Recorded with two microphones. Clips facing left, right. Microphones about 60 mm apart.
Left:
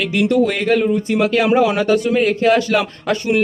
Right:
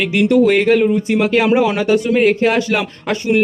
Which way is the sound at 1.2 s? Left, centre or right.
Right.